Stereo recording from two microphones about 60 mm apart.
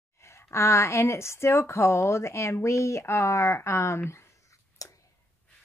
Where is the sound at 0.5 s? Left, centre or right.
Left.